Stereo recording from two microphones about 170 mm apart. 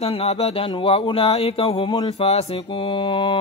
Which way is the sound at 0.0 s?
35° left (ahead or behind).